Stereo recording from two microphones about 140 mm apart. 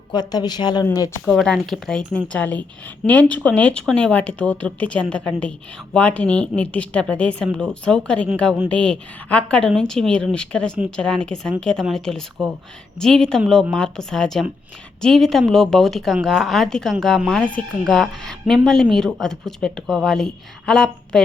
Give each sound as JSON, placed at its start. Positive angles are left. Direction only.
{"t": 0.1, "sound": "a woman's voice", "side_deg": 30}
{"t": 1.2, "sound": "a woman's voice", "side_deg": 5}